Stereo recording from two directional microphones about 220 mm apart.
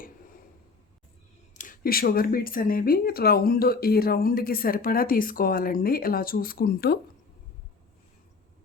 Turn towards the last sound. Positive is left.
turn(degrees=45)  # may be behind; listen again after turning